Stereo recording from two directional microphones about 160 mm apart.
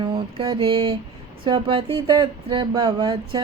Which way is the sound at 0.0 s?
30° right (ahead or behind).